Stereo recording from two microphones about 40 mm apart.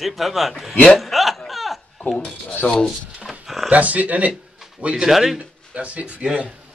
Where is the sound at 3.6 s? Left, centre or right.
Right.